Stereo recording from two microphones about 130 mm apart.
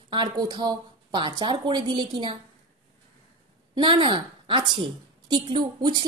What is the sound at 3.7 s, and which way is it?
A woman's voice, 35° right (ahead or behind).